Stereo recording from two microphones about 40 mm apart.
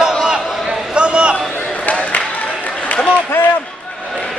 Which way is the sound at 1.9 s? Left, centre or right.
Left.